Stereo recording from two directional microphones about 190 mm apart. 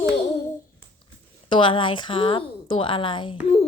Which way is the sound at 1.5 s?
25° left (ahead or behind).